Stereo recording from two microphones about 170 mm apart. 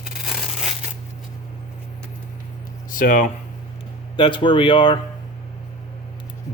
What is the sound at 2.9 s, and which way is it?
Speech, 50° left (ahead or behind).